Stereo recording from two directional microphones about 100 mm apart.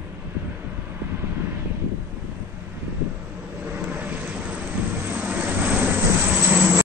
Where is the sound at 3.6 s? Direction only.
20° right (ahead or behind).